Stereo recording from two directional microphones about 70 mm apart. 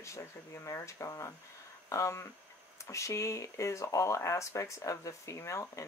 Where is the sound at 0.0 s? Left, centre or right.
Left.